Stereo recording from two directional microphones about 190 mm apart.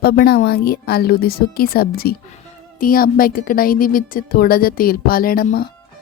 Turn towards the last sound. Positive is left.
turn(degrees=50)  # may be behind; listen again after turning